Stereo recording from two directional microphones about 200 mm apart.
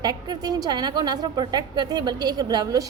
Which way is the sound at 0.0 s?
20° right (ahead or behind).